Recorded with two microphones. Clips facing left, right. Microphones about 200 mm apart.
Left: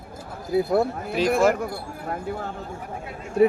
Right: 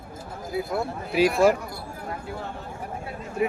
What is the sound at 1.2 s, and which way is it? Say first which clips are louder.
Speech: right 2 dB; 10° right (ahead or behind).